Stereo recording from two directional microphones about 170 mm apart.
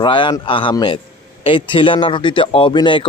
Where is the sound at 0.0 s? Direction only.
30° left (ahead or behind).